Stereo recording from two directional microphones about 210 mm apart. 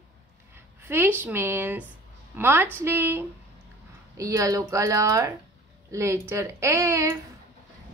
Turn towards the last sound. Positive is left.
turn(degrees=-15)  # may be behind; listen again after turning